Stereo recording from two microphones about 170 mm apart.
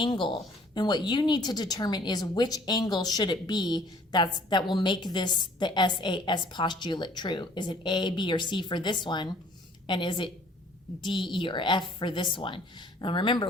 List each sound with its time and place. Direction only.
0.0 s a woman's voice: 25° left (ahead or behind)